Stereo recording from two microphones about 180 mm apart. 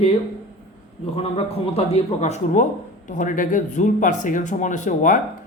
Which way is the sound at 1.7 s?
40° left (ahead or behind).